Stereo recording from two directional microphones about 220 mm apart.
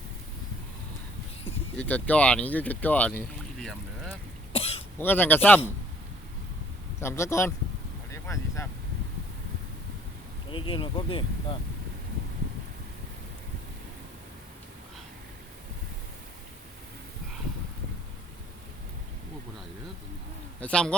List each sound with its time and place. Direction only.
1.8 s speech: 5° left (ahead or behind)
4.5 s cough: 25° left (ahead or behind)
4.9 s speech: 10° left (ahead or behind)
7.0 s speech: 10° left (ahead or behind)
8.1 s boat: 15° left (ahead or behind)
10.5 s speech: 25° left (ahead or behind)
20.6 s speech: 5° left (ahead or behind)